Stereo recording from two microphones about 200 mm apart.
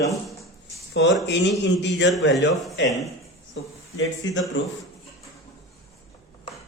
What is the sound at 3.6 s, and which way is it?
A man's voice, 70° left (ahead or behind).